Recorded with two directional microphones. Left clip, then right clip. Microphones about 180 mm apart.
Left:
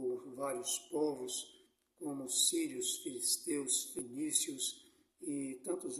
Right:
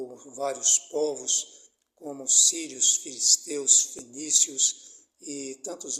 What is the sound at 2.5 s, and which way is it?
A man's voice, 20° left (ahead or behind).